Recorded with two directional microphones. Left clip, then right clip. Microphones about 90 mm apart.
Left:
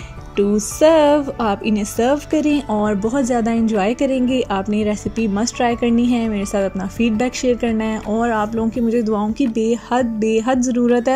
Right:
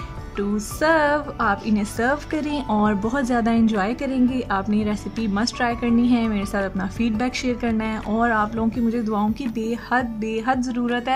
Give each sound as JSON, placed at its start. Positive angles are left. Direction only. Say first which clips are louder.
{"t": 0.4, "sound": "a woman's voice", "louder": "left 9 dB", "side_deg": 30}
{"t": 2.7, "sound": "a woman's voice", "louder": "left 3 dB", "side_deg": 10}